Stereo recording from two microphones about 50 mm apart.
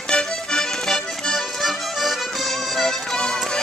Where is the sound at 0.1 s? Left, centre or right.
Centre.